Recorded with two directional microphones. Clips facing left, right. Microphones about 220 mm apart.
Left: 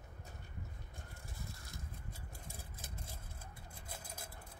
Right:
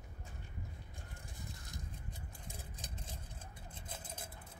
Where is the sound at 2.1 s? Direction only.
15° right (ahead or behind).